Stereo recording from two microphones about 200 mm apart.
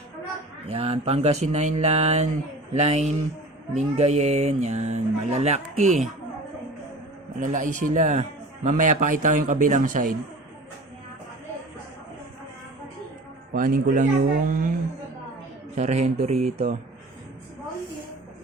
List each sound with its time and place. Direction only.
0.7 s a man's voice: 30° right (ahead or behind)
7.3 s a man's voice: 40° right (ahead or behind)
13.5 s speech: 45° right (ahead or behind)
15.7 s a man's voice: 35° right (ahead or behind)